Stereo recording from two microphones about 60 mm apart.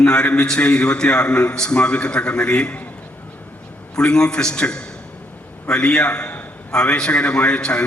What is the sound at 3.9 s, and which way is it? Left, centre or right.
A man's voice, centre.